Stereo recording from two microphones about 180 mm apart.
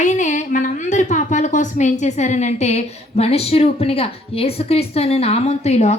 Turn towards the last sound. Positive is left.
turn(degrees=40)  # may be behind; listen again after turning